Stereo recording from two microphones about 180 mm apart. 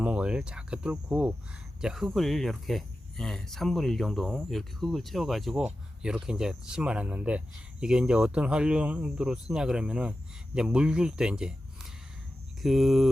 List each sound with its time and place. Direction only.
0.0 s speech: 5° right (ahead or behind)